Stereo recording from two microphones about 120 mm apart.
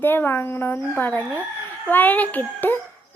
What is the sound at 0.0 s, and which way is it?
A child's voice, 15° left (ahead or behind).